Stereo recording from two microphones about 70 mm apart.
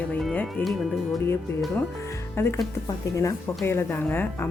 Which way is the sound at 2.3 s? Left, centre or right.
Left.